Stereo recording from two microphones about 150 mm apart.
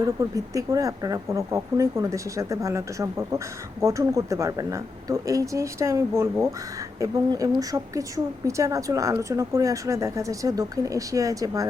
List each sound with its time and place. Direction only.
0.0 s speech: 20° right (ahead or behind)